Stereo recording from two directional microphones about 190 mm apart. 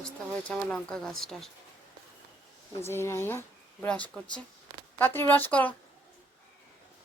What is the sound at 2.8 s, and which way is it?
Speech, 15° left (ahead or behind).